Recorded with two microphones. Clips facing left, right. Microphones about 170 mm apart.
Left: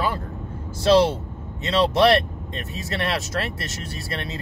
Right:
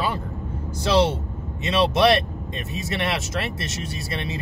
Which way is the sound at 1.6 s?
20° right (ahead or behind).